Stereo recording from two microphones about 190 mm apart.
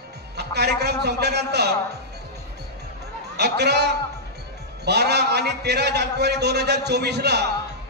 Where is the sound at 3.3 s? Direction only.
60° right (ahead or behind).